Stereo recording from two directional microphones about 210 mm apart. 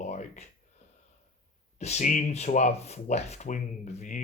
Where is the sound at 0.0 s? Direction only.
35° left (ahead or behind).